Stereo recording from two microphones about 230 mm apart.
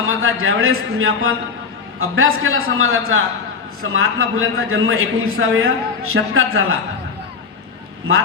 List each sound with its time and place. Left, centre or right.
0.1 s a man's voice: right